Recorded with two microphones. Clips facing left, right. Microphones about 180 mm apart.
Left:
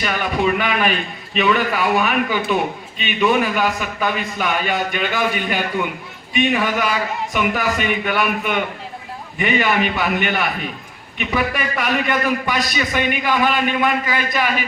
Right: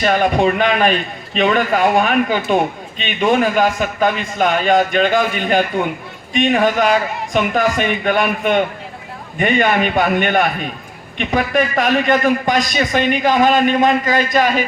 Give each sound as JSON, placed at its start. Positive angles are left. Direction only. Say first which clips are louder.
{"t": 0.0, "sound": "a man's voice", "louder": "right 6 dB", "side_deg": -50}
{"t": 9.4, "sound": "a man's voice", "louder": "right 3 dB", "side_deg": -50}